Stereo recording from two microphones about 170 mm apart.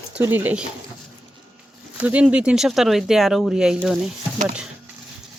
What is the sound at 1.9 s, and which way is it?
Speech, 10° right (ahead or behind).